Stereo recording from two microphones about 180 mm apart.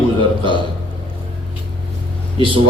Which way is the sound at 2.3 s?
30° right (ahead or behind).